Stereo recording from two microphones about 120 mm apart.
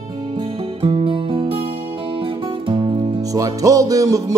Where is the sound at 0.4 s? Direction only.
50° right (ahead or behind).